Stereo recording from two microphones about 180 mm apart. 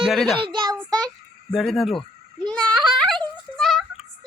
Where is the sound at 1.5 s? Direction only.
Centre (ahead or behind).